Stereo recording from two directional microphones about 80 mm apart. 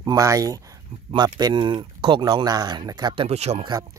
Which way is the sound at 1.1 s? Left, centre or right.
Right.